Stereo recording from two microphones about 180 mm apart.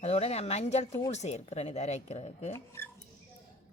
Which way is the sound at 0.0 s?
35° left (ahead or behind).